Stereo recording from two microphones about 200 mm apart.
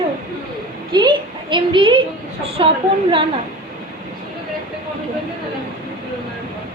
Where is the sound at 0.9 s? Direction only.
25° right (ahead or behind).